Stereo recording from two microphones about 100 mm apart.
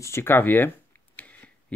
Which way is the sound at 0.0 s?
25° left (ahead or behind).